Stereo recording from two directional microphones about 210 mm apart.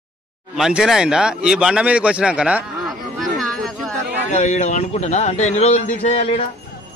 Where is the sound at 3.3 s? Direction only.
Centre (ahead or behind).